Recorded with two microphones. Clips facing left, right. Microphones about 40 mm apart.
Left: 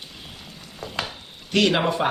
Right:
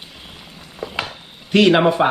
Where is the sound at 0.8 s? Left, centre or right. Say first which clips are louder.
Right 4 dB; centre.